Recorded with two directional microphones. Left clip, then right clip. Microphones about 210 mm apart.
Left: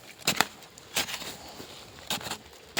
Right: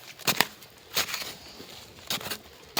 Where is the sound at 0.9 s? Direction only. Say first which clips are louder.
Right 2 dB; 10° right (ahead or behind).